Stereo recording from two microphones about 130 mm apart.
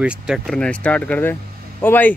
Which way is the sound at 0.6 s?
10° left (ahead or behind).